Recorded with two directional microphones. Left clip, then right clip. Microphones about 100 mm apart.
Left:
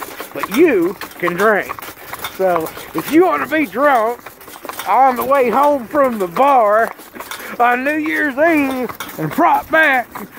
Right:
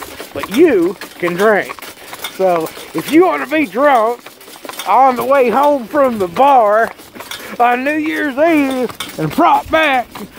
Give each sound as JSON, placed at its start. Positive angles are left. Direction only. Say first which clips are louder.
{"t": 0.4, "sound": "speech", "louder": "right 2 dB", "side_deg": 0}
{"t": 1.4, "sound": "speech", "louder": "right 2 dB", "side_deg": -20}
{"t": 2.4, "sound": "speech", "louder": "right 2 dB", "side_deg": 0}